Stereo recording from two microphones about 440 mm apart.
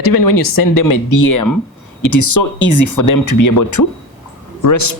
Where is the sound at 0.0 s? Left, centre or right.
Left.